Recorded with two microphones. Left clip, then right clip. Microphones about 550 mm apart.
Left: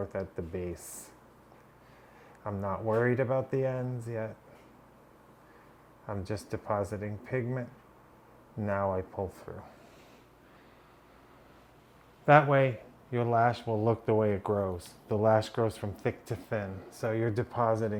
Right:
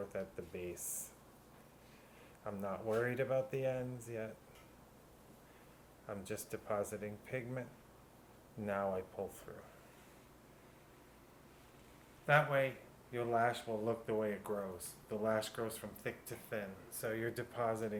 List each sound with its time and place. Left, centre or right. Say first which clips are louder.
0.1 s speech: left 8 dB; left
2.4 s speech: left 8 dB; left
6.1 s speech: left 7 dB; left
8.6 s speech: left 7 dB; left
12.2 s speech: left 10 dB; left